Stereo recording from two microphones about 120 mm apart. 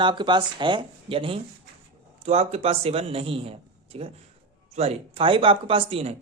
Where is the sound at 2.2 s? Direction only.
60° right (ahead or behind).